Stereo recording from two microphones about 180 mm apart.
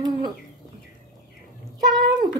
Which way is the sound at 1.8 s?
25° right (ahead or behind).